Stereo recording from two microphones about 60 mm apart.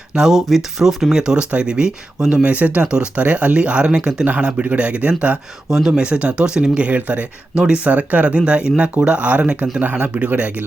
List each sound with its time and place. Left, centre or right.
0.1 s speech: centre
5.6 s speech: centre; by 10.6 s right